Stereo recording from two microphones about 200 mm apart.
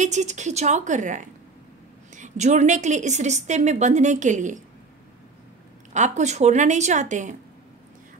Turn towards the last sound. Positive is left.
turn(degrees=-35)  # may be behind; listen again after turning